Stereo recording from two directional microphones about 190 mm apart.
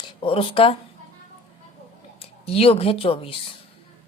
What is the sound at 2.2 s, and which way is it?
Speech, 30° left (ahead or behind).